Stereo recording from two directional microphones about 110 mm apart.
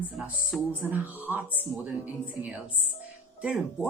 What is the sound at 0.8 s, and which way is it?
Speech, 15° right (ahead or behind).